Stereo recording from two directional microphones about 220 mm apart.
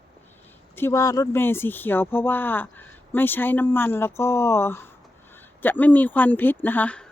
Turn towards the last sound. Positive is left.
turn(degrees=5)  # may be behind; listen again after turning